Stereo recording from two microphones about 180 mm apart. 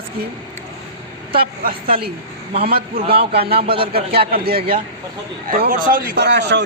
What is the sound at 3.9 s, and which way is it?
Speech, 55° right (ahead or behind).